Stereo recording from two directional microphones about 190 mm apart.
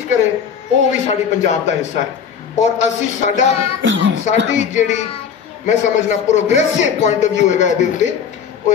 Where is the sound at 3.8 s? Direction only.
75° right (ahead or behind).